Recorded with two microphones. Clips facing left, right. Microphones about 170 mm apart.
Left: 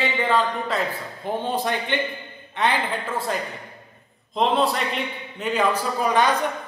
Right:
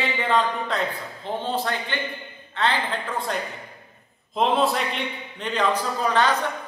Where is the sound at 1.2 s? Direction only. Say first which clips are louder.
Left 2 dB; 15° left (ahead or behind).